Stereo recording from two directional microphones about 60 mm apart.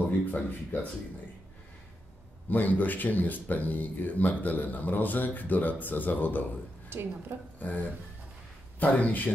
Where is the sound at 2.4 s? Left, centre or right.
Left.